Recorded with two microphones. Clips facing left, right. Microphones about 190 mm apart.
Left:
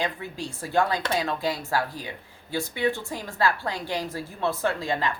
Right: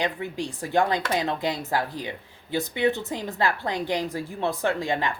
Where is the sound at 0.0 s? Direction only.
15° right (ahead or behind).